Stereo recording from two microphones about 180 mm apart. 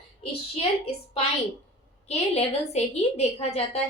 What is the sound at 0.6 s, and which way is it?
A woman's voice, 30° left (ahead or behind).